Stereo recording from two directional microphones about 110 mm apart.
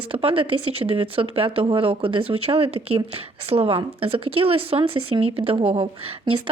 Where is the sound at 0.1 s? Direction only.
55° right (ahead or behind).